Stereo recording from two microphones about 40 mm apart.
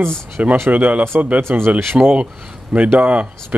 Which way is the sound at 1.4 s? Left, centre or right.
Right.